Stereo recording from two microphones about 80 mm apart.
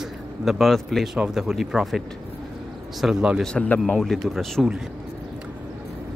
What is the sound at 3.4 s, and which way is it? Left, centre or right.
Speech, centre.